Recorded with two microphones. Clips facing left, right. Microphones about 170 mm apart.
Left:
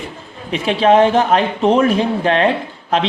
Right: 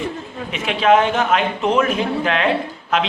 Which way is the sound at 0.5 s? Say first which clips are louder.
Left 3 dB; 35° left (ahead or behind).